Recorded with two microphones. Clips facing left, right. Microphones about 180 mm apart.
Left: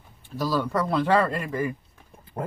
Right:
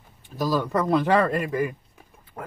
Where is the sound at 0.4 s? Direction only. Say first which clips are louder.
Right 1 dB; 15° right (ahead or behind).